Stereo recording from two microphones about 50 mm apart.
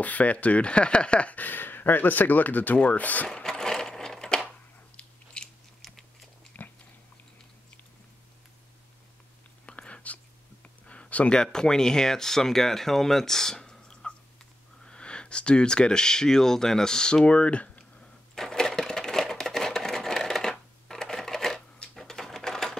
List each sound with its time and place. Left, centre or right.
0.0 s speech: left
3.4 s sewing machine: centre
4.9 s biting: centre
5.8 s biting: centre
6.5 s biting: left
9.7 s whispering: left
10.9 s a sound: left
11.3 s speech: centre
18.3 s sewing machine: centre
21.9 s typewriter: centre